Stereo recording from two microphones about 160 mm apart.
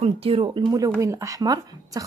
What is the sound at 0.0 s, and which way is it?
Speech, 35° right (ahead or behind).